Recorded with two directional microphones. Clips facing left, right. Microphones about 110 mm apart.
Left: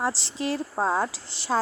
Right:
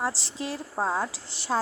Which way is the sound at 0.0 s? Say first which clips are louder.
Left 3 dB; 75° left (ahead or behind).